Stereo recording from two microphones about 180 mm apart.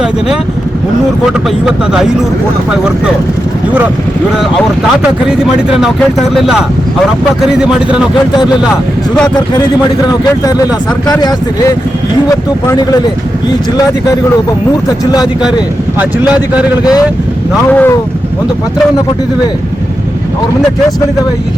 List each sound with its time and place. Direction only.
1.6 s speech: 5° right (ahead or behind)
5.4 s speech: 5° right (ahead or behind)
10.1 s speech: 20° left (ahead or behind)
14.8 s speech: 20° left (ahead or behind)
16.0 s speech: 5° right (ahead or behind)
17.7 s speech: 10° left (ahead or behind)